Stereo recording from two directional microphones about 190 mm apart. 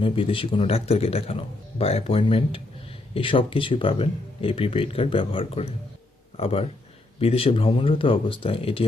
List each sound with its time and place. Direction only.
0.0 s speech: 30° left (ahead or behind)